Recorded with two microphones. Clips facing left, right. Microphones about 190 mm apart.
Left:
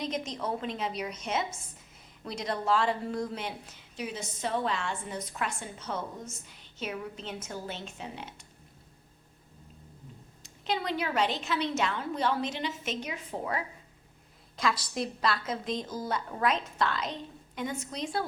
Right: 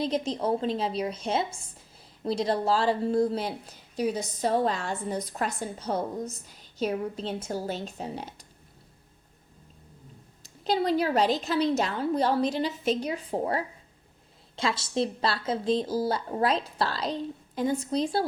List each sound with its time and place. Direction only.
0.0 s speech: 30° right (ahead or behind)
10.4 s speech: 35° right (ahead or behind)